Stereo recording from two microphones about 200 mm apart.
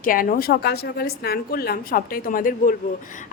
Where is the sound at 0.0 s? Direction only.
45° left (ahead or behind).